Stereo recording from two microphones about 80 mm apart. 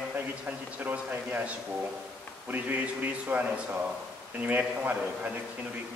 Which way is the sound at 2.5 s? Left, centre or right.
Right.